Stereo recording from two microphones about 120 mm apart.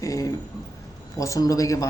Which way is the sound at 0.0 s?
30° left (ahead or behind).